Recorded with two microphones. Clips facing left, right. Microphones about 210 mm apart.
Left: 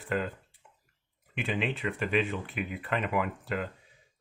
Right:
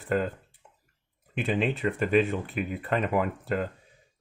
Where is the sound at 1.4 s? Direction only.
40° right (ahead or behind).